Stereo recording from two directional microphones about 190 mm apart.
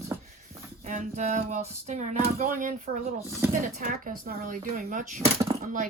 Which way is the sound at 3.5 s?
45° right (ahead or behind).